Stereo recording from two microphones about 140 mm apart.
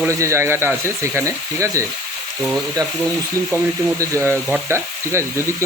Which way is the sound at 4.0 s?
20° right (ahead or behind).